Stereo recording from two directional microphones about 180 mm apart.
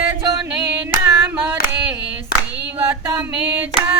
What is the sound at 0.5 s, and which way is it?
Hands, 5° right (ahead or behind).